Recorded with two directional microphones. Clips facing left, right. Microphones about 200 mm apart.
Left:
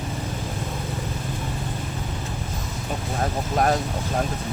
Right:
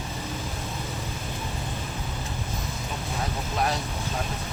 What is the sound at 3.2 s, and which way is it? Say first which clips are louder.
Speech: left 6 dB; 50° left (ahead or behind).